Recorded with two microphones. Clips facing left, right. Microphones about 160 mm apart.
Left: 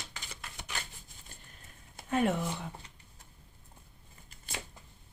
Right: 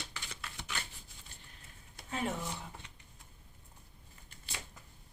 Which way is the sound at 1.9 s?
55° left (ahead or behind).